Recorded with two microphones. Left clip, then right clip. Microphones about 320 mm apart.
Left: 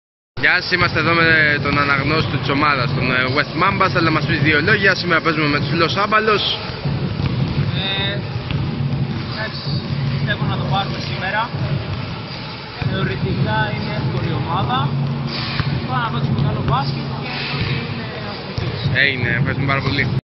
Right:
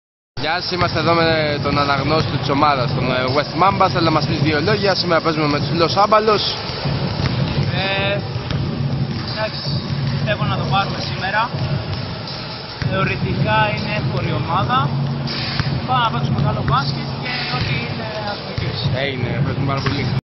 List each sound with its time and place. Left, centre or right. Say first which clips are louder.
0.4 s speech: left 4 dB; centre
7.8 s vehicle: right 2 dB; centre
12.9 s speech: right 3 dB; centre